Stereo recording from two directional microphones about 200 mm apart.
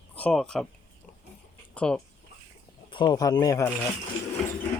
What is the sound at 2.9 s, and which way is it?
Speech, 20° left (ahead or behind).